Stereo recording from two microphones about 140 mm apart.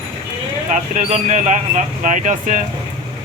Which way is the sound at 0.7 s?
55° right (ahead or behind).